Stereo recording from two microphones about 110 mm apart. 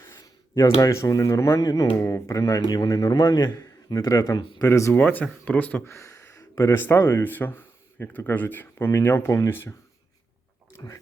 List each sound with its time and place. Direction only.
0.1 s a sound: 30° left (ahead or behind)
0.8 s a man's voice: 30° left (ahead or behind)
5.9 s speech: 25° left (ahead or behind)
10.8 s speech: 35° left (ahead or behind)